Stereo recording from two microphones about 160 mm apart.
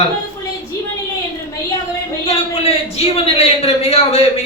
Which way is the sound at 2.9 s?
40° left (ahead or behind).